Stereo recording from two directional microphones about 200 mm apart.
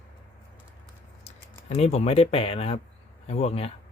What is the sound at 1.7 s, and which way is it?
Speech, 30° left (ahead or behind).